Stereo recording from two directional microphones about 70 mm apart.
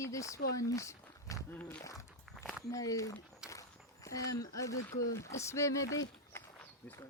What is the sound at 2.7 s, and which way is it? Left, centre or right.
Speech, left.